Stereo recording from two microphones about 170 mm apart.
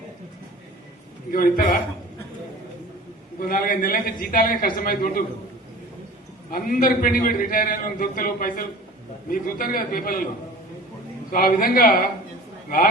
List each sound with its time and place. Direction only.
1.3 s a man's voice: 55° left (ahead or behind)
3.4 s a man's voice: 55° left (ahead or behind)
6.5 s a man's voice: 55° left (ahead or behind)
11.3 s a man's voice: 60° left (ahead or behind)